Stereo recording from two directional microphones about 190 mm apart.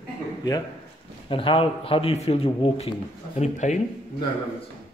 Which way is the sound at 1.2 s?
25° left (ahead or behind).